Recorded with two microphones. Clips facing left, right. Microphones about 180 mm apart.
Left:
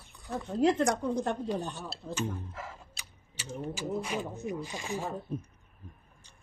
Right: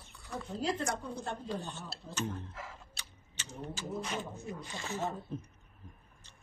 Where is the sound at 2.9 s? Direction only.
10° left (ahead or behind).